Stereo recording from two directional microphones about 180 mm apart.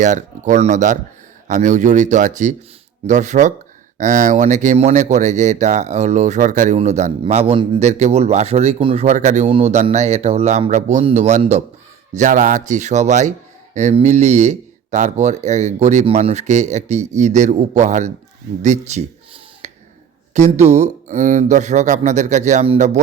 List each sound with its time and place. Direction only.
0.0 s speech: 45° right (ahead or behind)
18.6 s a sound: 40° right (ahead or behind)
20.3 s speech: 40° right (ahead or behind)